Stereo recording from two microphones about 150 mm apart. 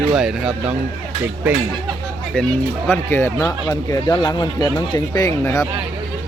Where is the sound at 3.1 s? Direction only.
20° left (ahead or behind).